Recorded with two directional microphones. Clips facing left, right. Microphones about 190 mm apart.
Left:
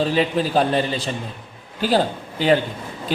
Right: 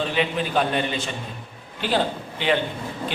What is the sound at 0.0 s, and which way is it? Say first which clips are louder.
Speech: left 4 dB; 35° left (ahead or behind).